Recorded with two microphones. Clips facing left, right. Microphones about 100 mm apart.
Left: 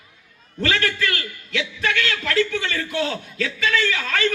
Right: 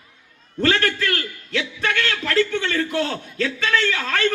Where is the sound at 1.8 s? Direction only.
40° right (ahead or behind).